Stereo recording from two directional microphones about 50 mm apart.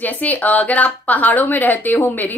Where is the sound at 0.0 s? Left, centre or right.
Left.